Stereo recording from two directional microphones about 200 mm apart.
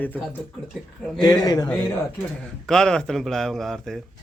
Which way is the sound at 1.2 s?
20° left (ahead or behind).